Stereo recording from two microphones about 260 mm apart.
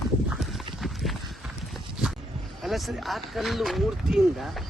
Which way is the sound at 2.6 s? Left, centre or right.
Centre.